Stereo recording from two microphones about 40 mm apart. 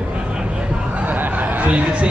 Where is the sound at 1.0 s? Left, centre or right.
Right.